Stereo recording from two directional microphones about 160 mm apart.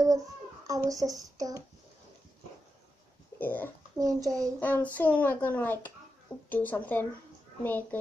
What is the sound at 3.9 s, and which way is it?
Speech, 20° right (ahead or behind).